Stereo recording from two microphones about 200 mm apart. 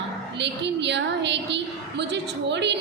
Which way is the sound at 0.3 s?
60° right (ahead or behind).